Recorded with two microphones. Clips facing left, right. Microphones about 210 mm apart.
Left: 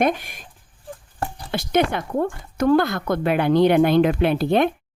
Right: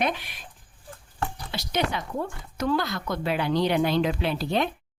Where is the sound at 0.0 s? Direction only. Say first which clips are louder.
Left 7 dB; 45° left (ahead or behind).